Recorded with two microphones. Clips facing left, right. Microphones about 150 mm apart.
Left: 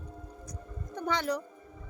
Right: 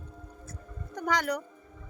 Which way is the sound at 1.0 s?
30° left (ahead or behind).